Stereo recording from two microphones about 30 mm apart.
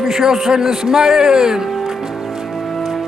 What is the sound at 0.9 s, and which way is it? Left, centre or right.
Speech, right.